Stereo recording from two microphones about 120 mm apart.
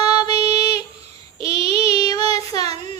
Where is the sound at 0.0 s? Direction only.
35° left (ahead or behind).